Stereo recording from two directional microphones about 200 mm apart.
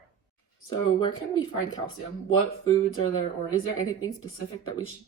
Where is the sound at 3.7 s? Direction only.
90° left.